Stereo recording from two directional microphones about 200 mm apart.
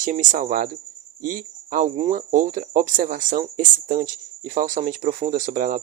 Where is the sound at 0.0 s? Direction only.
40° right (ahead or behind).